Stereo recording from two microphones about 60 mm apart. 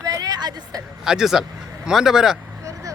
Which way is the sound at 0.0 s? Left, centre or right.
Right.